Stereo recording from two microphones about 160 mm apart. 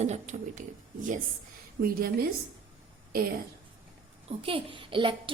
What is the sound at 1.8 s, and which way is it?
Speech, 65° right (ahead or behind).